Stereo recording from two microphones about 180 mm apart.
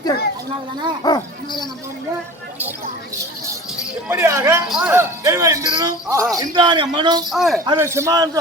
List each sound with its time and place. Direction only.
1.0 s speech: 25° left (ahead or behind)
4.1 s speech: 15° right (ahead or behind)
7.3 s speech: centre (ahead or behind)
7.6 s speech: 15° right (ahead or behind)